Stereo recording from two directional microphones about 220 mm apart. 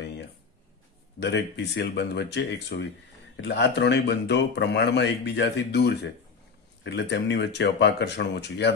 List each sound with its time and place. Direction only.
1.2 s a man's voice: 50° left (ahead or behind)